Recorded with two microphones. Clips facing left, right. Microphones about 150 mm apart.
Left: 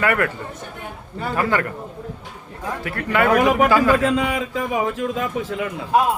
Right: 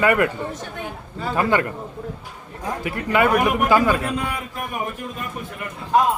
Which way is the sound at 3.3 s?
90° left.